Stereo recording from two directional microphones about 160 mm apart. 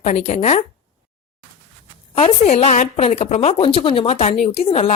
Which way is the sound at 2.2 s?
40° left (ahead or behind).